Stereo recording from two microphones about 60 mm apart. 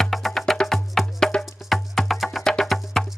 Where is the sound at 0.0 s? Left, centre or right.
Centre.